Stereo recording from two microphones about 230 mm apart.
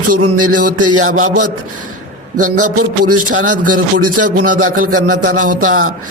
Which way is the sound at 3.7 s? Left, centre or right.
Right.